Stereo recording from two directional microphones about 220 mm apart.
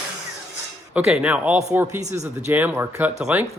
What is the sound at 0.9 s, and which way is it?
Speech, 5° right (ahead or behind).